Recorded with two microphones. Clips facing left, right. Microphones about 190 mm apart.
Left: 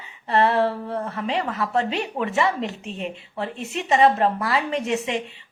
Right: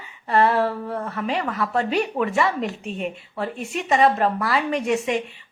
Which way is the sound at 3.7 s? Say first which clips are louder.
Left 1 dB; 30° left (ahead or behind).